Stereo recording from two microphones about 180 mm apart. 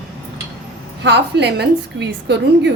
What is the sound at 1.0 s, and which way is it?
A woman's voice, 70° right (ahead or behind).